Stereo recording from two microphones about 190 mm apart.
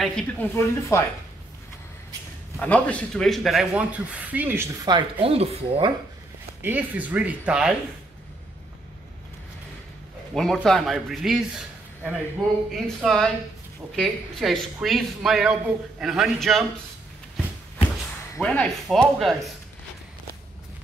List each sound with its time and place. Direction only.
0.0 s speech: 5° left (ahead or behind)
0.6 s speech: 15° left (ahead or behind)
2.6 s speech: 5° left (ahead or behind); by 4.6 s 10° right (ahead or behind)
4.8 s speech: 25° right (ahead or behind)
6.6 s speech: 10° right (ahead or behind)
10.3 s speech: centre (ahead or behind)
18.3 s speech: 5° left (ahead or behind)